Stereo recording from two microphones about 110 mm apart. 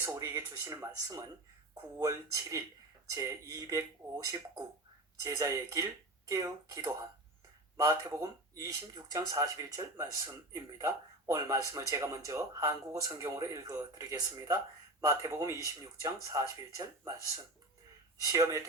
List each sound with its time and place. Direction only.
0.0 s speech: 20° right (ahead or behind)
8.1 s speech: 30° right (ahead or behind)
18.2 s speech: 30° right (ahead or behind)